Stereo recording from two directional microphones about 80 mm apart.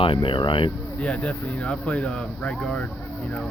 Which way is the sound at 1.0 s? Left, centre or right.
Centre.